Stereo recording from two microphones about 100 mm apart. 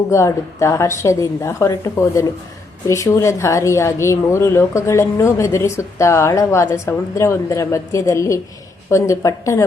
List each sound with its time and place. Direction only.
0.1 s a woman's voice: 30° left (ahead or behind)